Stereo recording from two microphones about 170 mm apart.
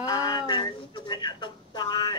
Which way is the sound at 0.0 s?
25° left (ahead or behind).